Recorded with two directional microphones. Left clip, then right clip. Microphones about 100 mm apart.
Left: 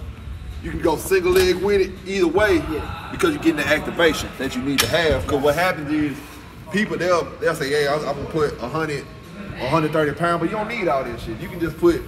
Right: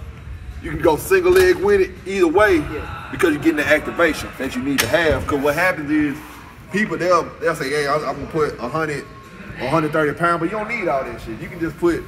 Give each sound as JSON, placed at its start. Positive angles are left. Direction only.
{"t": 0.8, "sound": "a man's voice", "side_deg": -15}
{"t": 6.8, "sound": "a man's voice", "side_deg": 5}